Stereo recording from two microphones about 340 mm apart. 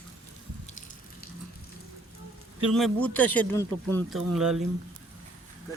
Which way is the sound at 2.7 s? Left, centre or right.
Centre.